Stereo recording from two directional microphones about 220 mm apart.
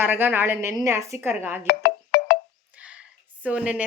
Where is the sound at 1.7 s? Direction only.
45° left (ahead or behind).